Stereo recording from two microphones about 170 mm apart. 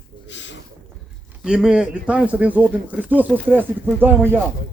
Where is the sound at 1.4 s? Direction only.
5° right (ahead or behind).